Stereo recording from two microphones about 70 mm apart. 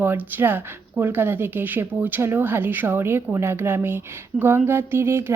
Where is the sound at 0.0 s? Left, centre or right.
Right.